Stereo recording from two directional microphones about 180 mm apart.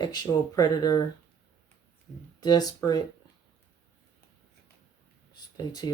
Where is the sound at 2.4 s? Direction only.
20° left (ahead or behind).